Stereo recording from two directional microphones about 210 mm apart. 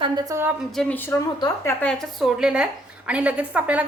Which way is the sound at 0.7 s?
5° left (ahead or behind).